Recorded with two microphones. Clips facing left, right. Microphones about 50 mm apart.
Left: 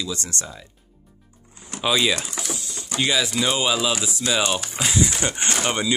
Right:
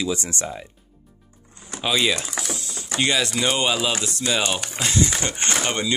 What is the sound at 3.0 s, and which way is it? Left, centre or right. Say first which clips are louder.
Speech: even; centre.